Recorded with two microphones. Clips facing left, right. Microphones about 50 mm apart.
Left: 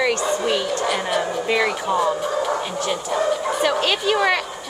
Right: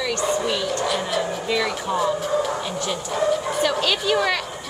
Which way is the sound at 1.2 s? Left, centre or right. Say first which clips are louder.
Left 3 dB; left.